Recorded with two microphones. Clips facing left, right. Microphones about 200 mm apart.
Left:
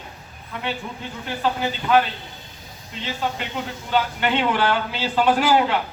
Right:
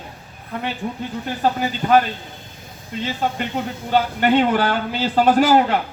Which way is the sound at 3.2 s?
50° right (ahead or behind).